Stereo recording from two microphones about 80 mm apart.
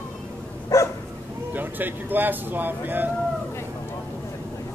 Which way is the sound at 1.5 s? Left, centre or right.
Right.